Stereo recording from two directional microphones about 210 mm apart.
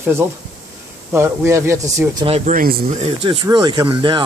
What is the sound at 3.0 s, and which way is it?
Speech, 25° right (ahead or behind).